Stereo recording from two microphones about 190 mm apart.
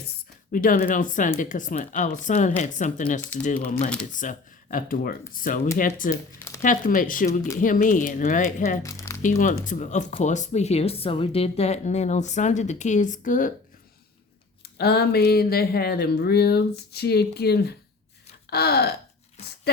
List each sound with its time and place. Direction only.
0.5 s speech: 45° left (ahead or behind)
7.3 s speech: 15° left (ahead or behind)
7.6 s speech: 45° left (ahead or behind)
8.8 s music: 15° left (ahead or behind)
9.2 s speech: 40° left (ahead or behind)
14.6 s speech: 55° left (ahead or behind)